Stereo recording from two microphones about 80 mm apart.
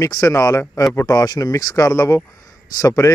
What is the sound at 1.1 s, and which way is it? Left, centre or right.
A man's voice, left.